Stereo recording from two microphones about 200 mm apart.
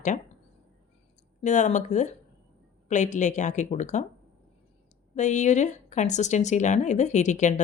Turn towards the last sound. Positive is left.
turn(degrees=35)  # may be behind; listen again after turning